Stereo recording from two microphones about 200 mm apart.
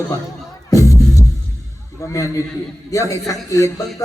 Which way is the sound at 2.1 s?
15° left (ahead or behind).